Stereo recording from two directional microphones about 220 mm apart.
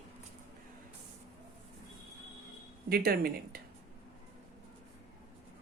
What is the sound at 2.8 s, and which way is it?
Speech, 45° right (ahead or behind).